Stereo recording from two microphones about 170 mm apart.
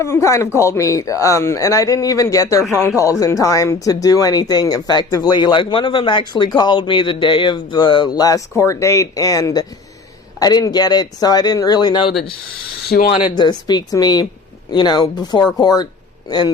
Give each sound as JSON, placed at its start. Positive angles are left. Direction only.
{"t": 0.0, "sound": "speech", "side_deg": 15}
{"t": 13.1, "sound": "speech", "side_deg": 25}